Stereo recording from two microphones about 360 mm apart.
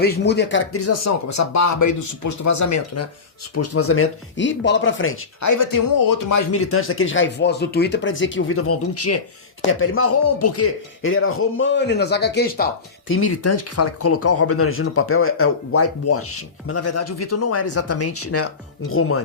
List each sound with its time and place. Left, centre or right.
0.0 s speech: left
5.4 s speech: left
6.5 s speech: left